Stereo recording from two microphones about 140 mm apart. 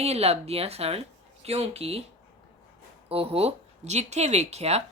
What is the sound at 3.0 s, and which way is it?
Speech, 45° right (ahead or behind).